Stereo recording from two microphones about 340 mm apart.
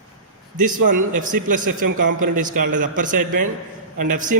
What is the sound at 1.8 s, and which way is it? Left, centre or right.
Speech, right.